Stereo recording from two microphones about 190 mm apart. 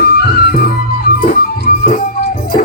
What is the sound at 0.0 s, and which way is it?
Music, 55° left (ahead or behind).